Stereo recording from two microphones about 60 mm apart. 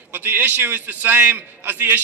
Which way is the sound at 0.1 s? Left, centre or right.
Right.